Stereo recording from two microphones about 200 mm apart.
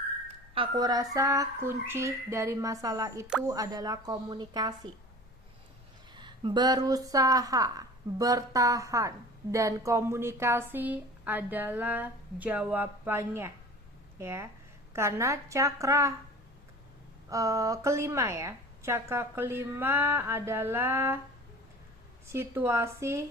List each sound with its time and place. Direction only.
0.5 s speech: 25° right (ahead or behind)
3.2 s speech: 5° right (ahead or behind)
3.5 s speech: 20° right (ahead or behind)
6.1 s speech: 20° right (ahead or behind)
17.2 s speech: 15° right (ahead or behind)
22.3 s speech: 10° right (ahead or behind)